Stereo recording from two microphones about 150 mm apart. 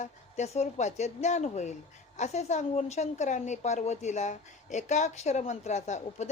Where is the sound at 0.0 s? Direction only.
50° left (ahead or behind).